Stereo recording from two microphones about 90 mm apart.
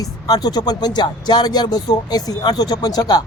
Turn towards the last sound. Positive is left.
turn(degrees=45)  # may be behind; listen again after turning